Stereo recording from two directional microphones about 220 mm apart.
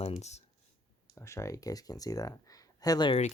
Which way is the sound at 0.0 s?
30° left (ahead or behind).